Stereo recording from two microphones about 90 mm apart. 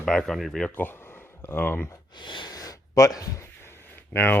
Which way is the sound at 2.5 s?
40° left (ahead or behind).